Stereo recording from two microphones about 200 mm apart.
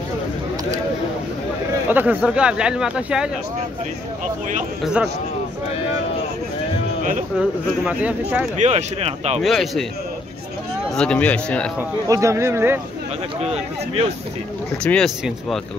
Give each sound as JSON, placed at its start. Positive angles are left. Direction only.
{"t": 1.9, "sound": "speech", "side_deg": -10}
{"t": 7.3, "sound": "speech", "side_deg": -5}
{"t": 8.5, "sound": "speech", "side_deg": -35}
{"t": 9.4, "sound": "speech", "side_deg": 0}
{"t": 11.0, "sound": "speech", "side_deg": 5}
{"t": 12.1, "sound": "speech", "side_deg": -15}
{"t": 13.4, "sound": "speech", "side_deg": -30}
{"t": 14.8, "sound": "speech", "side_deg": 5}